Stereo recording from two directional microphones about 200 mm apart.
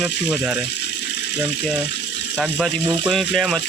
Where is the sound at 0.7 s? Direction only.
60° left (ahead or behind).